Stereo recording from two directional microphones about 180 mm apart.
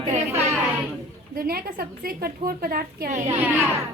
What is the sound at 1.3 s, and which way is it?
A woman's voice, 55° right (ahead or behind).